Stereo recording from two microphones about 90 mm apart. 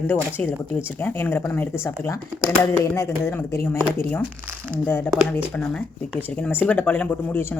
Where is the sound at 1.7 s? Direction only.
30° left (ahead or behind).